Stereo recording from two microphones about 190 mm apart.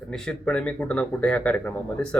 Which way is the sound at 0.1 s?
5° left (ahead or behind).